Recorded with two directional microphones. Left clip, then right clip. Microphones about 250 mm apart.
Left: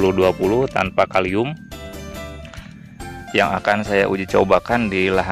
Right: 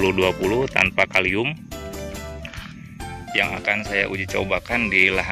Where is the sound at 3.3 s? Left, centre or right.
Left.